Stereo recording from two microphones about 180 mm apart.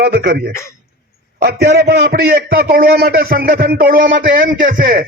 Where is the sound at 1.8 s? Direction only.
55° right (ahead or behind).